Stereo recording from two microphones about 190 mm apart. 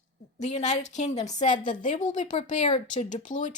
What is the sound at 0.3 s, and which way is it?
Speech, 40° left (ahead or behind).